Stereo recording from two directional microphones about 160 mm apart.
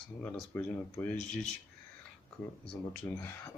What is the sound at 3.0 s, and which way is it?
Speech, 15° left (ahead or behind).